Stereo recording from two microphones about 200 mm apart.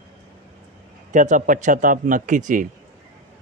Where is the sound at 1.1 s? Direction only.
40° right (ahead or behind).